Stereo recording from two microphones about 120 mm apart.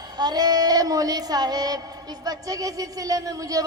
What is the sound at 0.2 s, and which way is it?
Speech, 35° right (ahead or behind).